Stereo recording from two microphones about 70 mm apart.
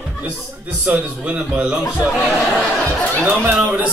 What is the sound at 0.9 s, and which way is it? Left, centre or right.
Speech, centre.